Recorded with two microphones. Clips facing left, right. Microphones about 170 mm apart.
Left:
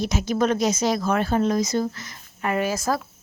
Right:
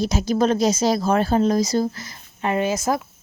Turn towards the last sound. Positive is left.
turn(degrees=-20)  # may be behind; listen again after turning